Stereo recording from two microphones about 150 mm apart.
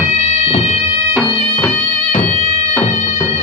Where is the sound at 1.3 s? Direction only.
40° left (ahead or behind).